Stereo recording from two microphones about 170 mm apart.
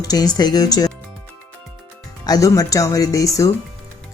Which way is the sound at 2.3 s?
20° left (ahead or behind).